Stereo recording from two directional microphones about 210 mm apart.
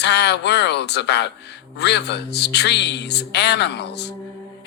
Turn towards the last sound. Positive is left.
turn(degrees=55)  # may be behind; listen again after turning